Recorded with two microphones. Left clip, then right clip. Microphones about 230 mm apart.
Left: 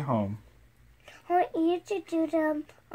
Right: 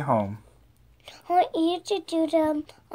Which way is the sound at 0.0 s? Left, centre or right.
Right.